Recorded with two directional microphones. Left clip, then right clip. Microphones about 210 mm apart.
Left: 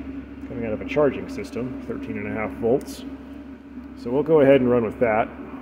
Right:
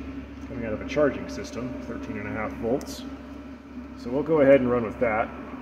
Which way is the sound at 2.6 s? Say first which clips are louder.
Left 6 dB; 15° left (ahead or behind).